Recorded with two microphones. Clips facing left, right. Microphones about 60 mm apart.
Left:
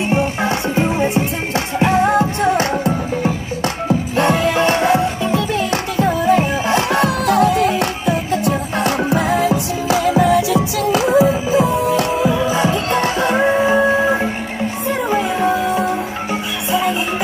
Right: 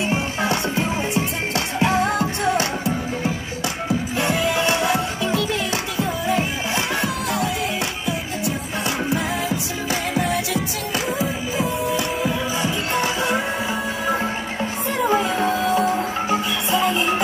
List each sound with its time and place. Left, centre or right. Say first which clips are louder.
0.4 s music: left 4 dB; left
2.5 s music: left 5 dB; left
4.2 s music: left 6 dB; left
5.9 s music: left 9 dB; left
10.9 s music: left 12 dB; left
12.6 s music: left 5 dB; left
15.0 s music: left 2 dB; centre